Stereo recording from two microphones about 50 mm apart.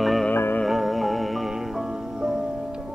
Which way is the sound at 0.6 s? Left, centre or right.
Centre.